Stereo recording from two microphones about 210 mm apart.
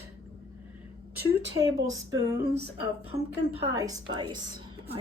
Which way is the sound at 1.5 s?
15° right (ahead or behind).